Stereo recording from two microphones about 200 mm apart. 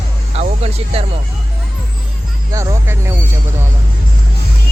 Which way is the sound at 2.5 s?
15° right (ahead or behind).